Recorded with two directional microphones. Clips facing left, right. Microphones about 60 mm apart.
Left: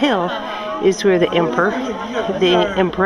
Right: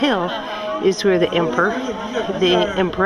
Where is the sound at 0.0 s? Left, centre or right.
Centre.